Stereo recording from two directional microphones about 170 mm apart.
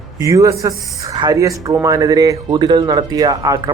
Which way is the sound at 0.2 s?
20° right (ahead or behind).